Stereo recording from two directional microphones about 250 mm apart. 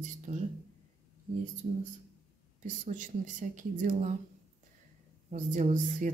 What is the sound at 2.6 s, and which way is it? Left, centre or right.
Speech, right.